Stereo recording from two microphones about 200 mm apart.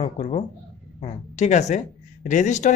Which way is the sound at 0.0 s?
35° left (ahead or behind).